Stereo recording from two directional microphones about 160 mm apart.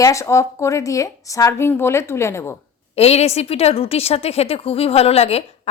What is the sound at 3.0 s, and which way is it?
A woman's voice, 40° left (ahead or behind).